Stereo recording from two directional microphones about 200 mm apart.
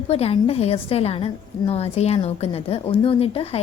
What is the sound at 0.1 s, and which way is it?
A woman's voice, 30° left (ahead or behind).